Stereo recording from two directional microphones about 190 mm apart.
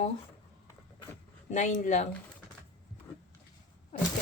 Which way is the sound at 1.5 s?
40° left (ahead or behind).